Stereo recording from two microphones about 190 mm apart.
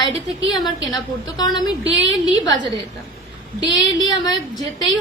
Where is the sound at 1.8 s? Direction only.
75° right (ahead or behind).